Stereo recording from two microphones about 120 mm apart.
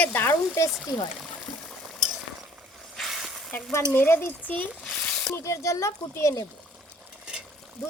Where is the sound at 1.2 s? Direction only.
Centre (ahead or behind).